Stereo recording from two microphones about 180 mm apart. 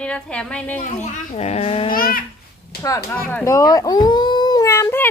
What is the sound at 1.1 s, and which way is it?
Speech, 40° left (ahead or behind).